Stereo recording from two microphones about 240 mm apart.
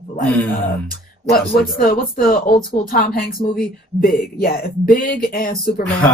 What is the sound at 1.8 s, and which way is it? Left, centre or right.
Speech, left.